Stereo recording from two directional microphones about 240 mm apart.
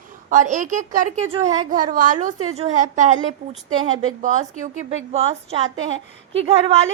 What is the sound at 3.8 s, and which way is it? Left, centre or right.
Speech, right.